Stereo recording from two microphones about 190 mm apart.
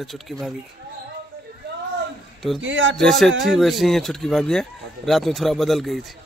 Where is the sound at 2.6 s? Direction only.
80° right.